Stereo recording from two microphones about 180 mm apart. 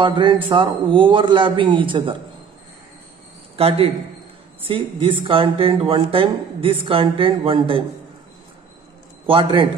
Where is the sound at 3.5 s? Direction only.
35° right (ahead or behind).